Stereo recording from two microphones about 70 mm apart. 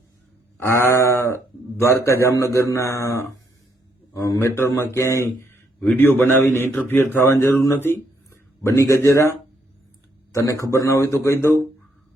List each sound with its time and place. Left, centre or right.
0.6 s a man's voice: left
5.9 s a man's voice: left
10.3 s a man's voice: left